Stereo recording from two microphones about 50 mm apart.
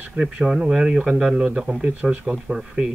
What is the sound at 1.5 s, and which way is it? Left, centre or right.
Speech, right.